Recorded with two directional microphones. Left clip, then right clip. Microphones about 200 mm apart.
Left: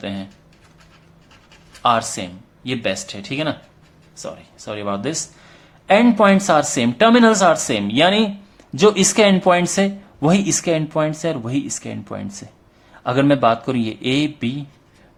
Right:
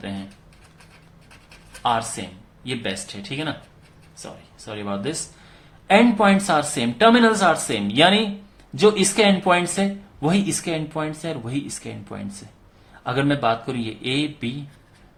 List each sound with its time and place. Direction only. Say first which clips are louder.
1.8 s speech: left 5 dB; 35° left (ahead or behind)